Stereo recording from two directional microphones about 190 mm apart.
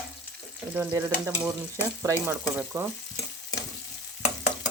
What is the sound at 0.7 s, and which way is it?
Frying, 10° right (ahead or behind).